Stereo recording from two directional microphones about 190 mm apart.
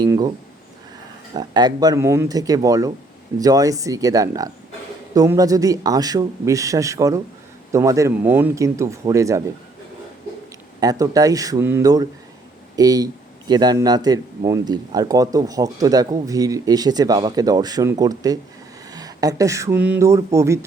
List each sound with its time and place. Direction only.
0.0 s a man's voice: 20° right (ahead or behind)
10.8 s a man's voice: 20° right (ahead or behind)